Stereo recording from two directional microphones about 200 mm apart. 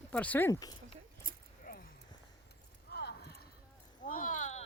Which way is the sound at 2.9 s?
55° left (ahead or behind).